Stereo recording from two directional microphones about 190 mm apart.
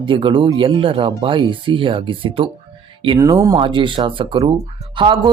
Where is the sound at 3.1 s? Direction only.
15° right (ahead or behind).